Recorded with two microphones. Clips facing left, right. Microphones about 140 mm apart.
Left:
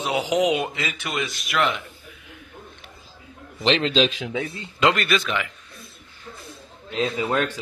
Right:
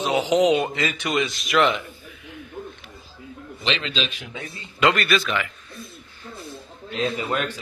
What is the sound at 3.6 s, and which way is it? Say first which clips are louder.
Speech: left 7 dB; 60° left (ahead or behind).